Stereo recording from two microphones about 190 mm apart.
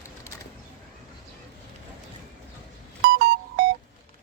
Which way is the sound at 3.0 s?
65° right (ahead or behind).